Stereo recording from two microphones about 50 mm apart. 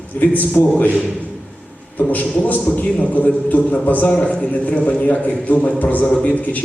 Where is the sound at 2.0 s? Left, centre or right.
Left.